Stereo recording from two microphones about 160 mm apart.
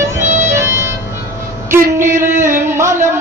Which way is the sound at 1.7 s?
15° right (ahead or behind).